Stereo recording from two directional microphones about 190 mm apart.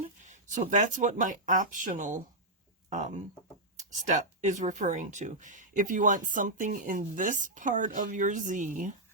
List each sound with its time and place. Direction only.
0.0 s speech: 40° right (ahead or behind)